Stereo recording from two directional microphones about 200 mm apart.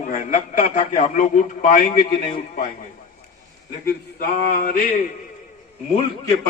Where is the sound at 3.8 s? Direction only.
50° left (ahead or behind).